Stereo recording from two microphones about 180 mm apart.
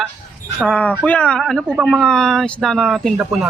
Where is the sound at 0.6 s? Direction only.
5° left (ahead or behind).